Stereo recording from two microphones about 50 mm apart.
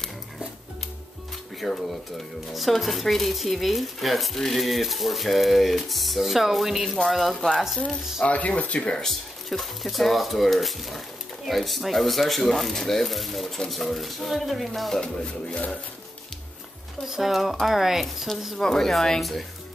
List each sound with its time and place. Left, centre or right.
1.6 s speech: centre
8.2 s speech: left
8.9 s speech: centre
15.0 s speech: centre
17.0 s speech: centre
18.0 s speech: centre